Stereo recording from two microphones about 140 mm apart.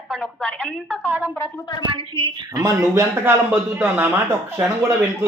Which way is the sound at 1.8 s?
35° right (ahead or behind).